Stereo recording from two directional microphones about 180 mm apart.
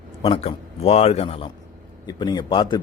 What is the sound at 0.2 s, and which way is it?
A man's voice, 35° left (ahead or behind).